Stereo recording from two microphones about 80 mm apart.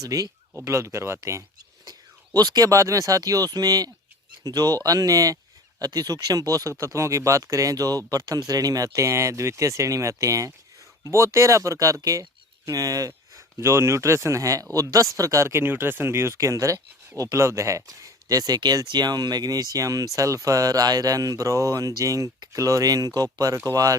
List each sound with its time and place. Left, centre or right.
0.0 s speech: right
0.5 s speech: right
2.4 s speech: right